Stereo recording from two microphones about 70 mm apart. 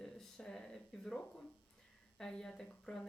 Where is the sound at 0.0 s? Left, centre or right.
Centre.